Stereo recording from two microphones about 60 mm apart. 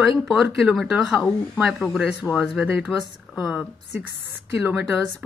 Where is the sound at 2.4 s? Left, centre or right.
Centre.